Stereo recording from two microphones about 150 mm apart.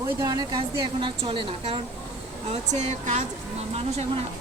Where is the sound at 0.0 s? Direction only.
25° right (ahead or behind).